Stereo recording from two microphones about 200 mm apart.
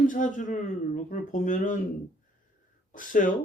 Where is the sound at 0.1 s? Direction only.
40° left (ahead or behind).